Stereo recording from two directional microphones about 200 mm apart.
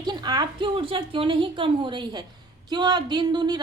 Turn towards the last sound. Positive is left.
turn(degrees=-20)  # may be behind; listen again after turning